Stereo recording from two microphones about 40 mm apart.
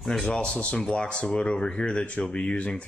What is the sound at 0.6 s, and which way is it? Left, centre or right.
Speech, left.